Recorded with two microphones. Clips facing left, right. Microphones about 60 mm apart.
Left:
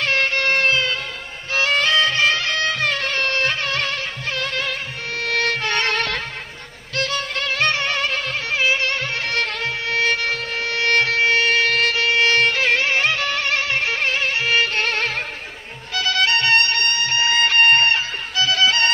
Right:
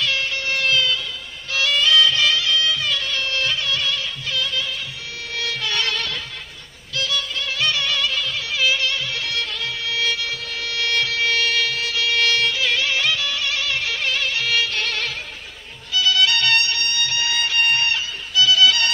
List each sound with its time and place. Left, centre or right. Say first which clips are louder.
0.0 s music: left 4 dB; left
11.7 s music: left 5 dB; left